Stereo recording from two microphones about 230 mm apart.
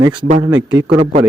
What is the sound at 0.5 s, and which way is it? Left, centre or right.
Speech, right.